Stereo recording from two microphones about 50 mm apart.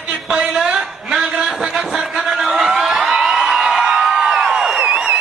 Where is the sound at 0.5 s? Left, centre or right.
Centre.